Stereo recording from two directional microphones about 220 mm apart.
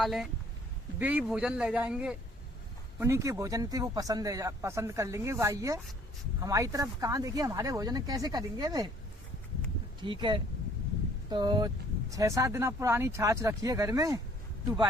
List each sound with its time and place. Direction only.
0.0 s speech: centre (ahead or behind); by 8.9 s 15° right (ahead or behind)
10.0 s speech: 20° right (ahead or behind)